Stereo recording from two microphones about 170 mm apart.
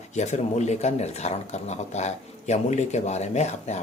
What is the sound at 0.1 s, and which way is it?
Speech, 45° left (ahead or behind).